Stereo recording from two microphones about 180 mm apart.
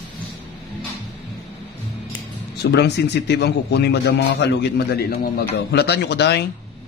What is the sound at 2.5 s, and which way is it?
A man's voice, 70° left (ahead or behind).